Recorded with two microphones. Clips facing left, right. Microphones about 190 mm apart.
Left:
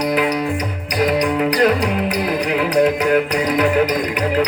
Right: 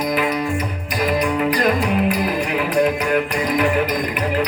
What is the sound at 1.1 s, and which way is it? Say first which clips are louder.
Music: even; 85° left.